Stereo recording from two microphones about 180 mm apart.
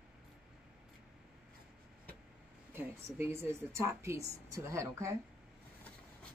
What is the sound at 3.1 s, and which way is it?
Speech, 15° right (ahead or behind).